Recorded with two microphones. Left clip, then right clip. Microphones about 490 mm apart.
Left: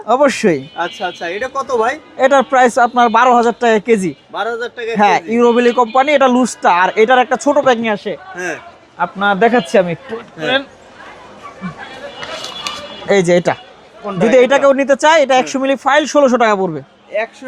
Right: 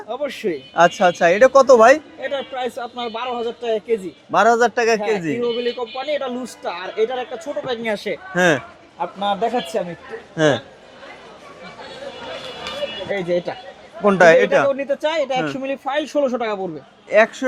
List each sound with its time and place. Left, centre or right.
0.1 s a man's voice: left
0.8 s speech: right
2.2 s a man's voice: left
4.3 s a man's voice: right
4.9 s speech: left
7.9 s speech: left
8.4 s a man's voice: right
9.0 s speech: left
13.1 s a man's voice: left
14.0 s a man's voice: right
14.7 s speech: left